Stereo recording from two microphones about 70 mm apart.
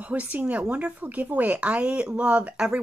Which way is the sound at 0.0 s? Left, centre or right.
Right.